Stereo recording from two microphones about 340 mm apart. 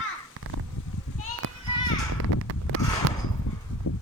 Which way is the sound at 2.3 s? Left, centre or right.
Right.